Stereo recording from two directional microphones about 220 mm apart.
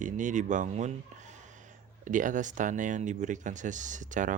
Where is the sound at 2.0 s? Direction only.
35° right (ahead or behind).